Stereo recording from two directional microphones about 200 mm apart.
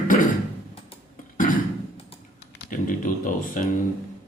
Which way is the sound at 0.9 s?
40° left (ahead or behind).